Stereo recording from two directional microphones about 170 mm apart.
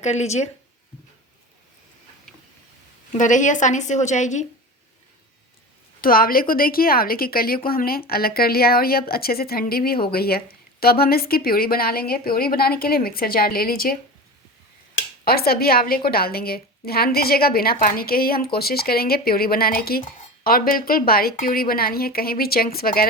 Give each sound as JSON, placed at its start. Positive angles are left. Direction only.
{"t": 0.0, "sound": "speech", "side_deg": 40}
{"t": 3.1, "sound": "a woman's voice", "side_deg": 50}
{"t": 6.0, "sound": "a woman's voice", "side_deg": 60}
{"t": 15.2, "sound": "a woman's voice", "side_deg": 65}